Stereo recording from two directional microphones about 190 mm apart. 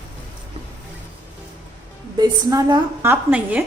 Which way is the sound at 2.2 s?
20° right (ahead or behind).